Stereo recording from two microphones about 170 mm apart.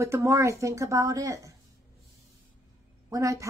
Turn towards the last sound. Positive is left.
turn(degrees=-20)  # may be behind; listen again after turning